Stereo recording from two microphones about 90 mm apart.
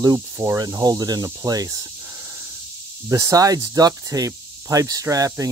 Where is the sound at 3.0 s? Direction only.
35° right (ahead or behind).